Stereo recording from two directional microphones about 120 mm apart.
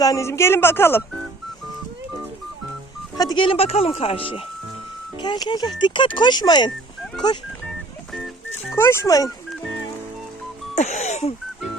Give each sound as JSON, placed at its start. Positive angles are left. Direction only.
{"t": 0.0, "sound": "speech", "side_deg": 25}
{"t": 3.2, "sound": "speech", "side_deg": 40}
{"t": 5.2, "sound": "speech", "side_deg": 40}
{"t": 8.7, "sound": "speech", "side_deg": 20}
{"t": 10.8, "sound": "speech", "side_deg": 70}